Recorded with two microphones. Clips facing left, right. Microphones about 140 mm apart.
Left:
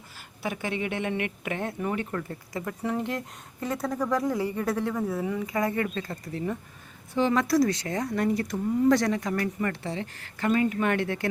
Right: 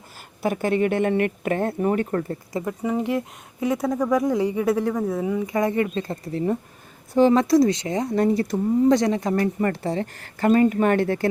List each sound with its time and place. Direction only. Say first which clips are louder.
0.4 s speech: right 9 dB; 45° right (ahead or behind)
2.5 s speech: right 3 dB; 20° right (ahead or behind)
2.9 s speech: right 8 dB; 10° right (ahead or behind); by 7.4 s 35° right (ahead or behind)
7.4 s speech: right 6 dB; 25° right (ahead or behind)